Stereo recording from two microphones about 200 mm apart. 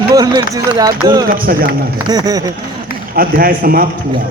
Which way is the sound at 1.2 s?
45° right (ahead or behind).